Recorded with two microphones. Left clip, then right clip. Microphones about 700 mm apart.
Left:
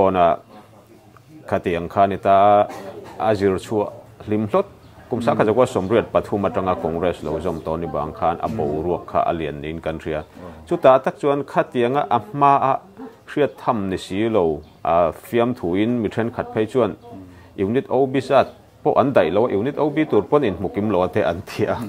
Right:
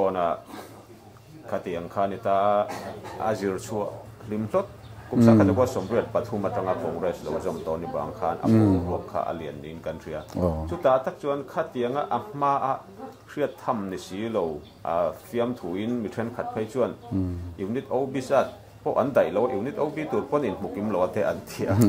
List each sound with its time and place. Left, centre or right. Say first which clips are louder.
0.0 s speech: left 8 dB; left
1.5 s speech: left 8 dB; left